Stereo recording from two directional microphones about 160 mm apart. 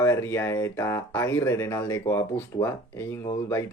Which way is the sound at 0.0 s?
15° left (ahead or behind).